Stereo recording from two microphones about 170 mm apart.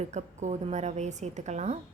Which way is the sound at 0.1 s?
45° right (ahead or behind).